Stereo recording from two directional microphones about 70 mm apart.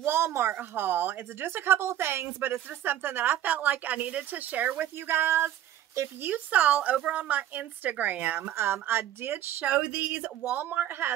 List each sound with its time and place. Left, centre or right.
0.0 s a sound: right
0.6 s speech: right
6.2 s speech: right
8.4 s speech: right
9.8 s speech: right